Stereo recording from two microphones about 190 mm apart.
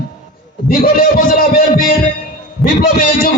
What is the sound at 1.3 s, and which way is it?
Music, 50° left (ahead or behind).